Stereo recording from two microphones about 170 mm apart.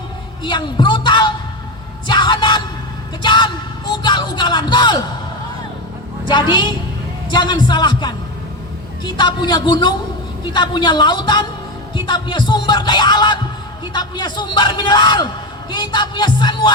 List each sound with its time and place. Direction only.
0.4 s a man's voice: 30° left (ahead or behind)
2.0 s music: 25° left (ahead or behind)
3.2 s a man's voice: 25° left (ahead or behind)
6.2 s a man's voice: 30° left (ahead or behind)